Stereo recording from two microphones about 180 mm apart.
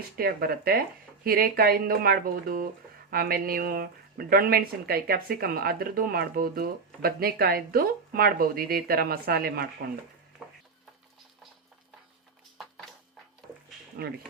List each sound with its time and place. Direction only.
0.2 s speech: 55° right (ahead or behind)
14.0 s speech: 60° right (ahead or behind)